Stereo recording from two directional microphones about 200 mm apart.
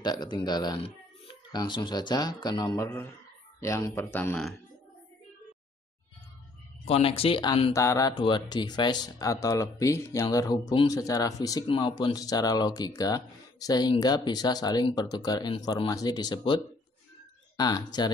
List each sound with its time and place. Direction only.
0.0 s speech: 20° left (ahead or behind); by 4.6 s 5° left (ahead or behind)
6.8 s speech: 30° left (ahead or behind)
7.7 s speech: 15° left (ahead or behind)
17.6 s speech: 20° left (ahead or behind)